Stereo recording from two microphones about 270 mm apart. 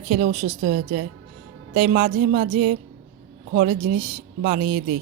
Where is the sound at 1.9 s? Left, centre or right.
Right.